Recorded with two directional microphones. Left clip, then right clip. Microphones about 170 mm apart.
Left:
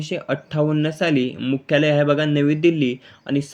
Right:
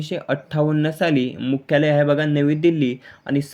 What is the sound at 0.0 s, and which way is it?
Speech, 10° right (ahead or behind).